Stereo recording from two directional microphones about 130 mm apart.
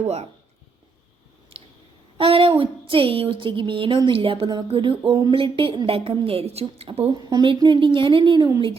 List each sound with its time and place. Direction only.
0.0 s speech: 55° right (ahead or behind)
2.1 s a woman's voice: 45° right (ahead or behind)
7.1 s a woman's voice: 30° right (ahead or behind)